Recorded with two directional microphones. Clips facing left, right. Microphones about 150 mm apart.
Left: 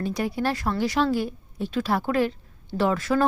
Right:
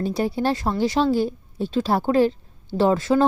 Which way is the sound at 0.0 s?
30° right (ahead or behind).